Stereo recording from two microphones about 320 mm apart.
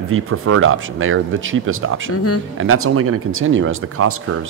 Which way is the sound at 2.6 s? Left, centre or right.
Right.